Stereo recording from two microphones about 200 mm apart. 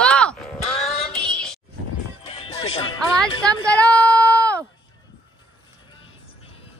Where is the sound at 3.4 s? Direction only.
5° left (ahead or behind).